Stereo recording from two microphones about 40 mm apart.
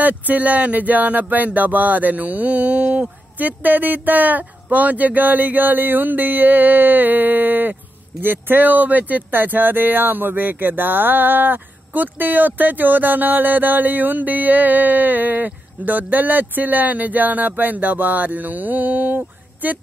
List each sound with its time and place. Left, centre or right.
0.0 s speech: right